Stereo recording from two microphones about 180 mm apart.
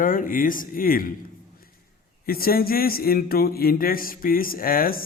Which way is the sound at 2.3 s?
55° left (ahead or behind).